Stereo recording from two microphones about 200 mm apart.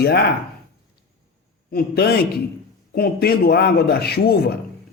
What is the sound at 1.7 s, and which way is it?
A man's voice, 50° left (ahead or behind).